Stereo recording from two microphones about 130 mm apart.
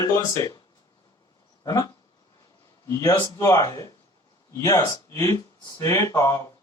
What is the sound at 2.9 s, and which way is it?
Speech, 25° left (ahead or behind).